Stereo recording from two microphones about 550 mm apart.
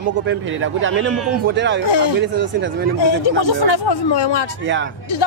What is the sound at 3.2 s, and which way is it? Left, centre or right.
Speech, left.